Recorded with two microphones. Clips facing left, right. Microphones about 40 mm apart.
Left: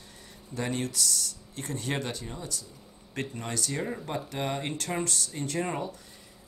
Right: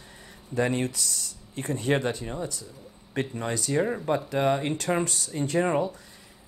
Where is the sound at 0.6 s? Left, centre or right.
Right.